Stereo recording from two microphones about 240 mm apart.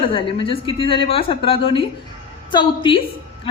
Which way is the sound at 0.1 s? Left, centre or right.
Left.